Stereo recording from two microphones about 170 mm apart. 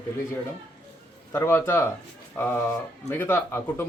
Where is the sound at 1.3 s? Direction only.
15° left (ahead or behind).